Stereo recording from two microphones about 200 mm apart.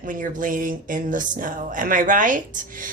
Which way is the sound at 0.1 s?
40° right (ahead or behind).